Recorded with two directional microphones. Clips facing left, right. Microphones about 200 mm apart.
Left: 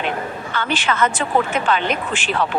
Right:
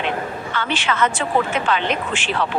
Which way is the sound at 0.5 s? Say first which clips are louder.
Left 2 dB; 45° left (ahead or behind).